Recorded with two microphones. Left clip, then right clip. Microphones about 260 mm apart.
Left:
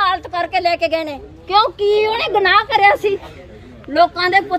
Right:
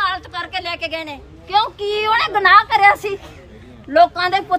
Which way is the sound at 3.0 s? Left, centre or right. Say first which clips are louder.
Left 6 dB; centre.